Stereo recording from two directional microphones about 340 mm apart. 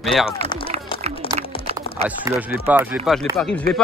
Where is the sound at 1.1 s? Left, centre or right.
Centre.